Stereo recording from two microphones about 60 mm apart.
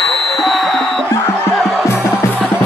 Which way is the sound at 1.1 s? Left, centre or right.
Left.